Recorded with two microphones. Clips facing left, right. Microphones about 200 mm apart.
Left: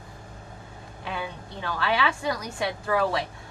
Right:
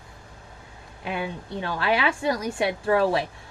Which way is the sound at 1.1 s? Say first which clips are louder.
Right 4 dB; 20° right (ahead or behind).